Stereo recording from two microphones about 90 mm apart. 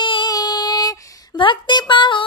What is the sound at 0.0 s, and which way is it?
Music, 65° left (ahead or behind).